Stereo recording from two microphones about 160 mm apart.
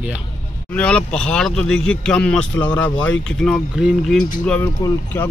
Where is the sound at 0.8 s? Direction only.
5° left (ahead or behind).